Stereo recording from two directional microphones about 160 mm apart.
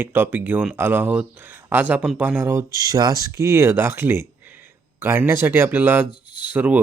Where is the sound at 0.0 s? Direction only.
15° right (ahead or behind).